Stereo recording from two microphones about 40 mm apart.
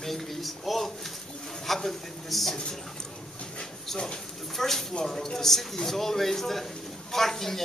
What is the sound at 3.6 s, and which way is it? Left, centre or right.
Dog, centre.